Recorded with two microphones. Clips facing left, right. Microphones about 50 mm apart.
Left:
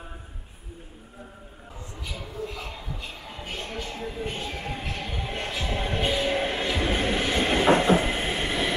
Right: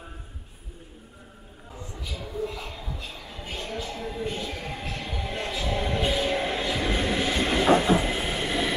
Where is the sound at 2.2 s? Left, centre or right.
Centre.